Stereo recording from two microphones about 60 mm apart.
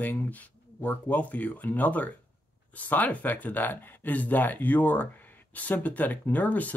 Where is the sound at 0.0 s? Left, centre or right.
Left.